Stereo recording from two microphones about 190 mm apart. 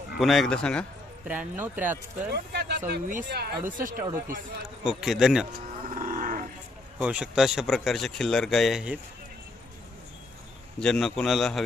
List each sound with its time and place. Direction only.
0.2 s speech: centre (ahead or behind)
1.3 s speech: 10° right (ahead or behind)
2.3 s a sound: 60° right (ahead or behind)
2.8 s speech: 45° right (ahead or behind)
3.2 s speech: 60° right (ahead or behind)
3.8 s speech: 45° right (ahead or behind)
4.8 s speech: centre (ahead or behind)
5.9 s livestock: 45° right (ahead or behind)
7.0 s speech: 5° right (ahead or behind)
10.8 s speech: 5° left (ahead or behind)